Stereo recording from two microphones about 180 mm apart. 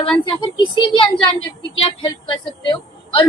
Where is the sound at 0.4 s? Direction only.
25° left (ahead or behind).